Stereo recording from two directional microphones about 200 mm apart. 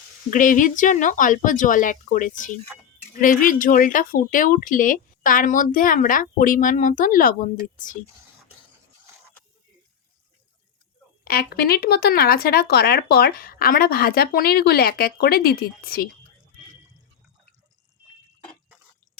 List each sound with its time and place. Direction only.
0.3 s speech: 40° left (ahead or behind)
11.3 s speech: 50° left (ahead or behind)